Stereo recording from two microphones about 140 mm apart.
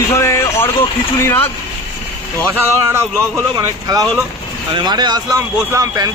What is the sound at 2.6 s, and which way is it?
Speech, 20° right (ahead or behind).